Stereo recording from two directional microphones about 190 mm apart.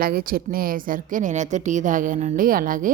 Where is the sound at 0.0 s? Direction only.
50° right (ahead or behind).